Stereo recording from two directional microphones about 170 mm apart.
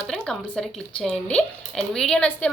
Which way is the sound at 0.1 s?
5° left (ahead or behind).